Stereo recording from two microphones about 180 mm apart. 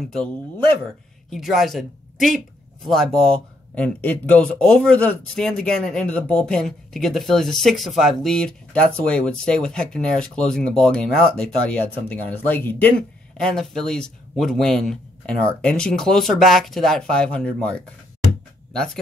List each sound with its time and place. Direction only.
1.3 s speech: centre (ahead or behind)